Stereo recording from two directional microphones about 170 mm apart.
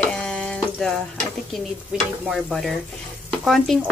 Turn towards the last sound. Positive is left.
turn(degrees=0)  # may be behind; listen again after turning